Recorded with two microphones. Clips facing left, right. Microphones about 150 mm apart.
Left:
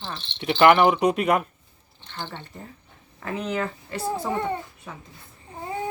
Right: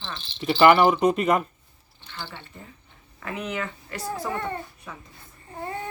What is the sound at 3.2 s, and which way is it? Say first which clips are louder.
Speech: left 3 dB; 30° left (ahead or behind).